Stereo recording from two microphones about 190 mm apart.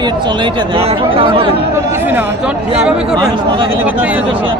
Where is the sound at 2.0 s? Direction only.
10° right (ahead or behind).